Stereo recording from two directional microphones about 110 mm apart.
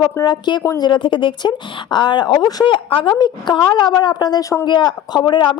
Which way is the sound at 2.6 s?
50° left (ahead or behind).